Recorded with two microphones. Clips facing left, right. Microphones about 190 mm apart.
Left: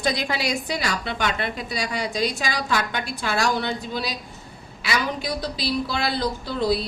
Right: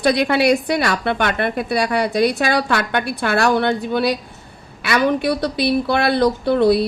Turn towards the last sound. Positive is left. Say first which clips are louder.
# right 9 dB
turn(degrees=-60)  # may be behind; listen again after turning